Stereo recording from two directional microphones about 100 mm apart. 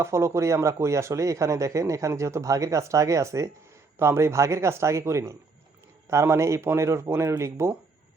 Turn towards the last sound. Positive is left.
turn(degrees=-25)  # may be behind; listen again after turning